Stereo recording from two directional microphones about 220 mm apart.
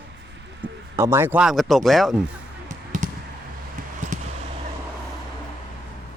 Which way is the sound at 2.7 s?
35° right (ahead or behind).